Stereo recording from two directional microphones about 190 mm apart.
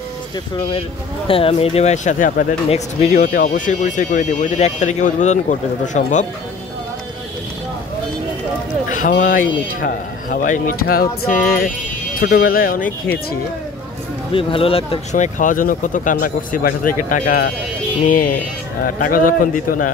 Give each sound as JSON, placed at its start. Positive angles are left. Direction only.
{"t": 0.7, "sound": "speech", "side_deg": 30}
{"t": 8.8, "sound": "a sound", "side_deg": 45}
{"t": 9.2, "sound": "speech", "side_deg": 45}
{"t": 12.1, "sound": "speech", "side_deg": 50}
{"t": 14.3, "sound": "speech", "side_deg": 30}